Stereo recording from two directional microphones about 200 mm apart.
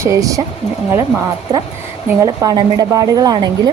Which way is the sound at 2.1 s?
15° right (ahead or behind).